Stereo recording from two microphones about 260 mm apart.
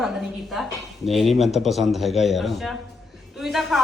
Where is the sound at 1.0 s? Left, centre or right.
Centre.